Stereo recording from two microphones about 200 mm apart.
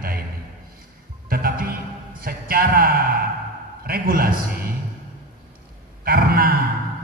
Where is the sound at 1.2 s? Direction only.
50° right (ahead or behind).